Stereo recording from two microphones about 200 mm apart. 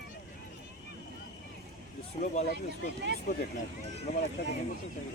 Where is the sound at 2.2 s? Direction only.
40° left (ahead or behind).